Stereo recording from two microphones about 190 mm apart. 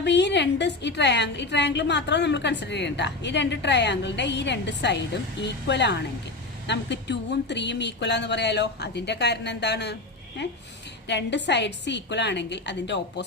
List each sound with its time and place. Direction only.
0.0 s a woman's voice: 65° left (ahead or behind)